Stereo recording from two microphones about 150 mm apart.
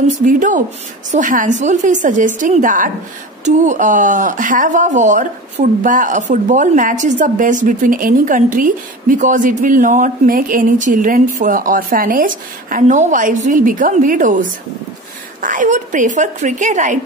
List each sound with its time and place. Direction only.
0.1 s speech: 60° right (ahead or behind)